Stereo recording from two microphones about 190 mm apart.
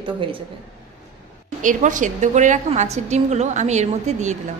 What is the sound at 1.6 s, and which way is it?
A woman's voice, 40° right (ahead or behind).